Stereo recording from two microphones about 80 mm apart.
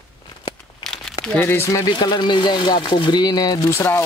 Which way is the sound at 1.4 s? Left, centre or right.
Left.